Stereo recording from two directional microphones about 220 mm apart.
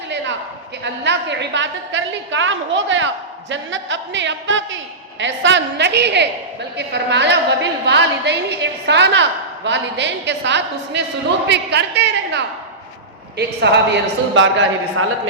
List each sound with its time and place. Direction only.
0.9 s a woman's voice: 55° right (ahead or behind)